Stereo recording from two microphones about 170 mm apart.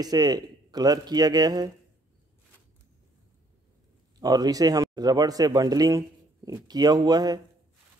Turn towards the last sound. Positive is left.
turn(degrees=-20)  # may be behind; listen again after turning